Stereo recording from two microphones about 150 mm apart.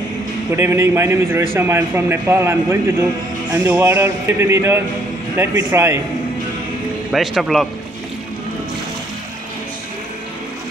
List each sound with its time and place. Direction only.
0.6 s a man's voice: 20° right (ahead or behind)
7.1 s speech: centre (ahead or behind)